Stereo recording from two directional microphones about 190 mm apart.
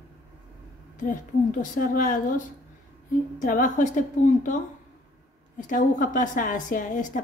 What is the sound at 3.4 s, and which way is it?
A woman's voice, 45° left (ahead or behind).